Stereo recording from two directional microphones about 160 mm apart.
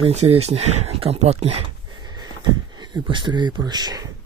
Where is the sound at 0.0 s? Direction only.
40° right (ahead or behind).